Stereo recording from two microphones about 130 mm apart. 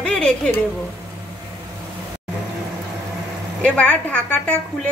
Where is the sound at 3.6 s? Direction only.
10° left (ahead or behind).